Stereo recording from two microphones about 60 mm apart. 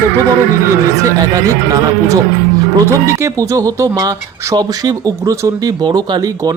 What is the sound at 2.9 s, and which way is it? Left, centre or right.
Speech, right.